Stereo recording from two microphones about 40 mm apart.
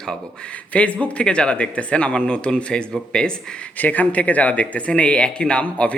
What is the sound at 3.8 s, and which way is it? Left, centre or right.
Speech, left.